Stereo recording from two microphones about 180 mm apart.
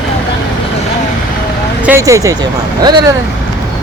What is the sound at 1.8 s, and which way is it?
Speech, 15° right (ahead or behind).